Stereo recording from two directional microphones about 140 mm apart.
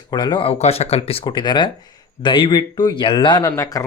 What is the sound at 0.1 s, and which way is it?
Speech, 30° left (ahead or behind).